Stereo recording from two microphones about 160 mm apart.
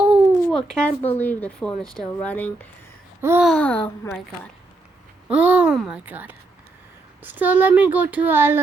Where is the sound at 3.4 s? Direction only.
10° left (ahead or behind).